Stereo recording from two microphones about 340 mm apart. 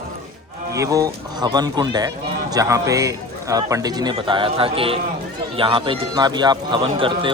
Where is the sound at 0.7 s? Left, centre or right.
Centre.